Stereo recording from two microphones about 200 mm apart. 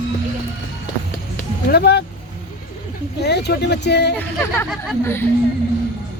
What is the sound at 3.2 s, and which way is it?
Speech, 55° left (ahead or behind).